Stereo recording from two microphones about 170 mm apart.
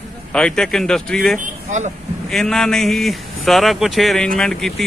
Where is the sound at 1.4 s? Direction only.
45° right (ahead or behind).